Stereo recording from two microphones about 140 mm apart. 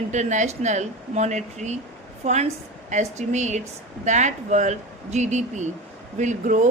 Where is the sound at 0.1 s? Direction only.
60° right (ahead or behind).